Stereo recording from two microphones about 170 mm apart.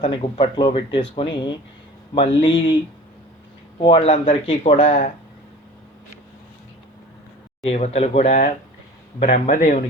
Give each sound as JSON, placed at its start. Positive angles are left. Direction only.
{"t": 0.0, "sound": "speech", "side_deg": 30}
{"t": 3.8, "sound": "speech", "side_deg": 30}
{"t": 7.7, "sound": "speech", "side_deg": 40}